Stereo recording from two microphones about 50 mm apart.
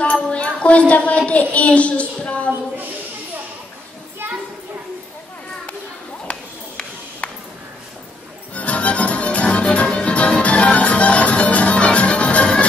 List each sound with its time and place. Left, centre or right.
0.0 s a woman's voice: left
8.5 s music: left